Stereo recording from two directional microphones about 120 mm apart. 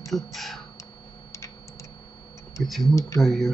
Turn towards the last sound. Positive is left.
turn(degrees=0)  # may be behind; listen again after turning